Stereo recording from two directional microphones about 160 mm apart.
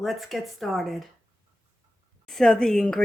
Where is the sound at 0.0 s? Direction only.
Centre (ahead or behind).